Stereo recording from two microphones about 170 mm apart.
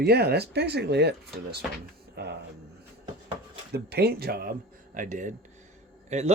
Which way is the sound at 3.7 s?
70° right (ahead or behind).